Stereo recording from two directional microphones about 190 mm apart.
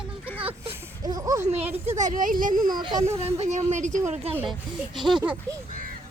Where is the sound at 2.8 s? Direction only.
20° right (ahead or behind).